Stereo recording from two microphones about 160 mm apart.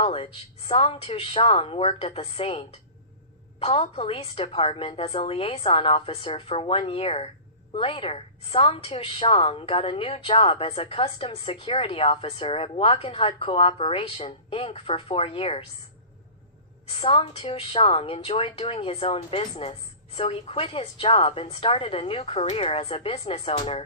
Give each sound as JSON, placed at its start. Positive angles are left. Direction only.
{"t": 0.0, "sound": "a woman's voice", "side_deg": 35}
{"t": 16.9, "sound": "a woman's voice", "side_deg": 35}